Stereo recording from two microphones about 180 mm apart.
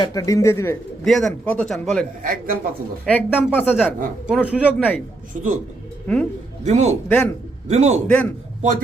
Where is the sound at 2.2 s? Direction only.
50° right (ahead or behind).